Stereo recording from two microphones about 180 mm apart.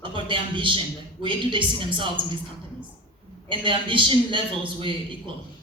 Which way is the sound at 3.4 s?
30° right (ahead or behind).